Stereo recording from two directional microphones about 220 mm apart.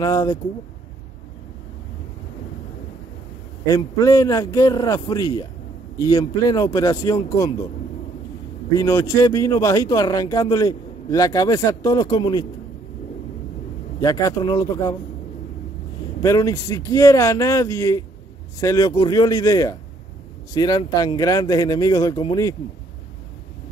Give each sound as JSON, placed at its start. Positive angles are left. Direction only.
{"t": 0.0, "sound": "speech", "side_deg": 15}
{"t": 3.6, "sound": "speech", "side_deg": 15}
{"t": 8.7, "sound": "speech", "side_deg": 15}
{"t": 14.0, "sound": "speech", "side_deg": 15}
{"t": 16.2, "sound": "speech", "side_deg": 15}